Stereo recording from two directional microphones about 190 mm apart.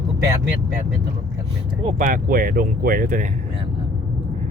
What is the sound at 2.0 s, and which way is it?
Speech, 45° right (ahead or behind).